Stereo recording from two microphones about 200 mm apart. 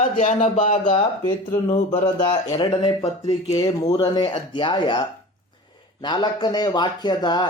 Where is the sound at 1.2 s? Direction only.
20° left (ahead or behind).